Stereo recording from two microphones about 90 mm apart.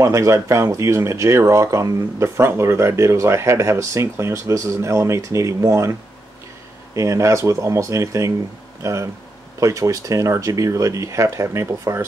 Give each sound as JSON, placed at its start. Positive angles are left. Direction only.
{"t": 0.0, "sound": "speech", "side_deg": -35}
{"t": 7.0, "sound": "speech", "side_deg": -35}